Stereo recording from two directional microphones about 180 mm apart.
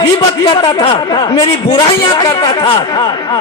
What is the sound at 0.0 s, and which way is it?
A man's voice, 30° left (ahead or behind).